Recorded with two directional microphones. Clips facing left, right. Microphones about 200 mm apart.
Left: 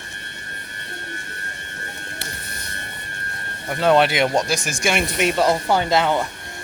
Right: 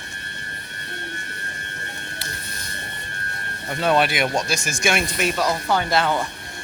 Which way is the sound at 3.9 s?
20° left (ahead or behind).